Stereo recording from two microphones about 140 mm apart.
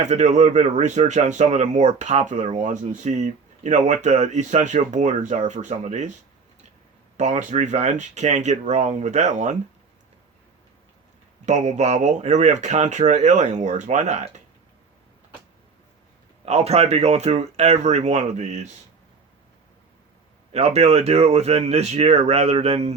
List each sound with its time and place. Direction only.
0.0 s speech: 55° right (ahead or behind)
7.2 s speech: 55° right (ahead or behind)
11.4 s speech: 55° right (ahead or behind)
16.5 s speech: 50° right (ahead or behind)
20.5 s speech: 50° right (ahead or behind)